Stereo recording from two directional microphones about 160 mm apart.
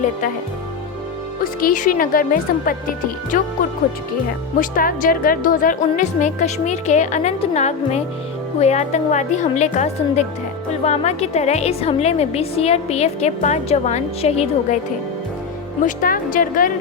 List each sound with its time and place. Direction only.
1.6 s speech: 55° left (ahead or behind)
4.6 s a woman's voice: 60° left (ahead or behind); by 14.8 s 40° left (ahead or behind)
15.8 s speech: 60° left (ahead or behind)